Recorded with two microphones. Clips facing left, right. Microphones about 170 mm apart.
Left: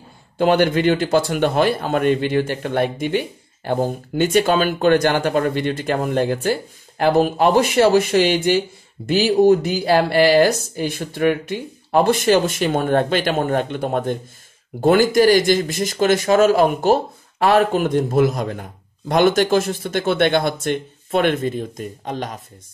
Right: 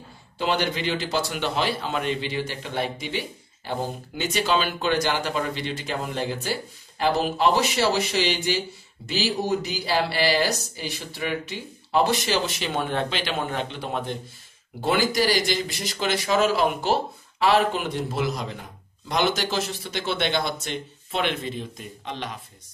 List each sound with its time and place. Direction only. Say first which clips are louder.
0.4 s a man's voice: left 9 dB; 50° left (ahead or behind)